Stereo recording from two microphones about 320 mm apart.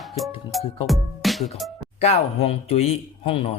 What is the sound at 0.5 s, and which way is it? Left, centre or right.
Speech, centre.